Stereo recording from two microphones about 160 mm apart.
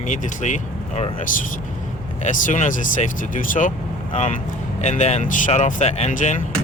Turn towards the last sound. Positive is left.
turn(degrees=45)  # may be behind; listen again after turning